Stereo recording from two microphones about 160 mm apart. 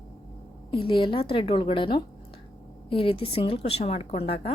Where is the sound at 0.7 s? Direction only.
35° left (ahead or behind).